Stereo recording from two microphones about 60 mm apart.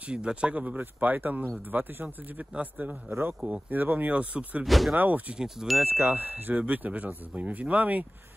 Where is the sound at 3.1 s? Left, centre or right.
Right.